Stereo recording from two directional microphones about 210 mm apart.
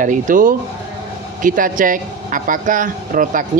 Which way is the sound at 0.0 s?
40° right (ahead or behind).